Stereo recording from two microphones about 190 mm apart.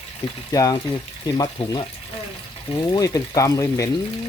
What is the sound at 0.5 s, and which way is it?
Speech, 20° left (ahead or behind).